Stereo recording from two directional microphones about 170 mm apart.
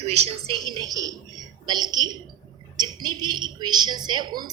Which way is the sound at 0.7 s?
20° right (ahead or behind).